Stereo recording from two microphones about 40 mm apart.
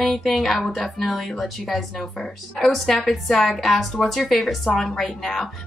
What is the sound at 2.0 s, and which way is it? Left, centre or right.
A woman's voice, centre.